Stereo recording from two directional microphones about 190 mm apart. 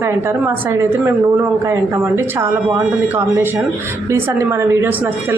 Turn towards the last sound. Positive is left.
turn(degrees=-15)  # may be behind; listen again after turning